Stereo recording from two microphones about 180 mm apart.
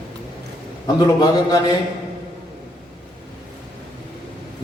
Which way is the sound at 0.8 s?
25° left (ahead or behind).